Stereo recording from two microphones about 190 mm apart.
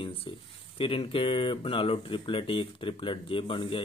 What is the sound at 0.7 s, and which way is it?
Speech, 30° left (ahead or behind).